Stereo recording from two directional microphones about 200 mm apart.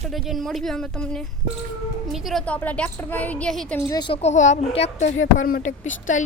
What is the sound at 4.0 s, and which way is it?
A child's voice, 30° left (ahead or behind).